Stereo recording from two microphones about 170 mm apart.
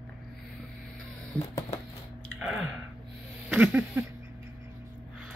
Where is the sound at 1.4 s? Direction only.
20° left (ahead or behind).